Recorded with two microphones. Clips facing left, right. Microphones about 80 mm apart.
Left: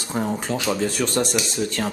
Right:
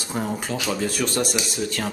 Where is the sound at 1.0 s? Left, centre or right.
Centre.